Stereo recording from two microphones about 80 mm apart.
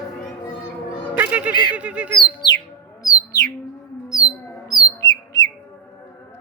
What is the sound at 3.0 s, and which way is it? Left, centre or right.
Bird, left.